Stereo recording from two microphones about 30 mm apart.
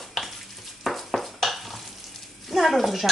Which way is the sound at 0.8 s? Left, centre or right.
Centre.